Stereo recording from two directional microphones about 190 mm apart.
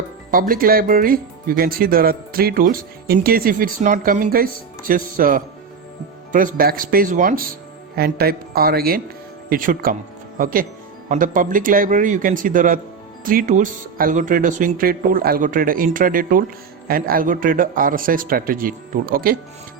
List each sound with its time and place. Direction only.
0.3 s speech: 50° right (ahead or behind)
7.9 s speech: 55° right (ahead or behind)